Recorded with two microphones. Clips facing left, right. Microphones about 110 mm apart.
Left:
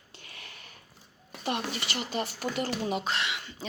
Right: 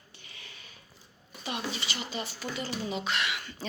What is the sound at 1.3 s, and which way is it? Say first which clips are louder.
Speech: left 3 dB; 60° left (ahead or behind).